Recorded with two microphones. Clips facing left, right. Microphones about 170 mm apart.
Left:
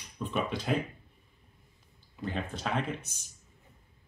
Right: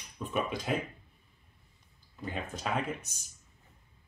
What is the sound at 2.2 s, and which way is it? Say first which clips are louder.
Speech: left 2 dB; 5° right (ahead or behind).